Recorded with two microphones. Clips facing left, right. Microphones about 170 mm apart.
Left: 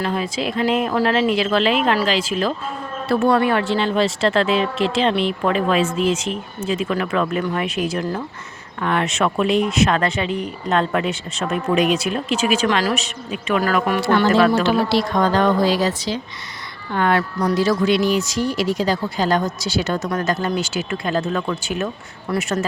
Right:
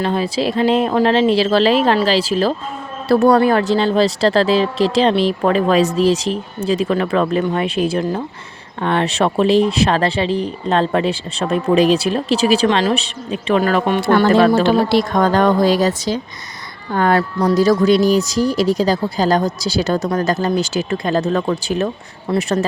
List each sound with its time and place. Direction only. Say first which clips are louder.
0.0 s speech: right 4 dB; 30° right (ahead or behind)
14.0 s a woman's voice: right 3 dB; 50° right (ahead or behind); by 22.6 s 35° right (ahead or behind)